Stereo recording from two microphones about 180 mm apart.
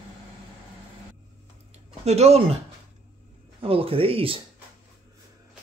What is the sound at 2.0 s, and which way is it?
Speech, 35° right (ahead or behind).